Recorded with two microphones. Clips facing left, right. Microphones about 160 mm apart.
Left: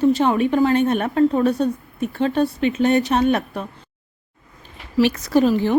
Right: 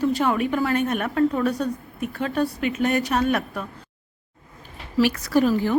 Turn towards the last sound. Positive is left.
turn(degrees=25)  # may be behind; listen again after turning